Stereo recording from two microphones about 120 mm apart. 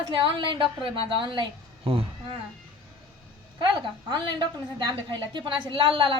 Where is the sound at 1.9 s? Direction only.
50° right (ahead or behind).